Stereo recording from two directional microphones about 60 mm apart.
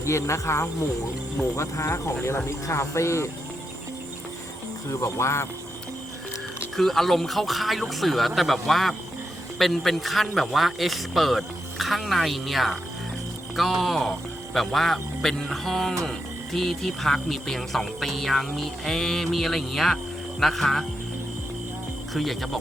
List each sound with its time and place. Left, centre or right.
0.0 s speech: left
4.9 s speech: left
6.7 s speech: centre
22.1 s speech: centre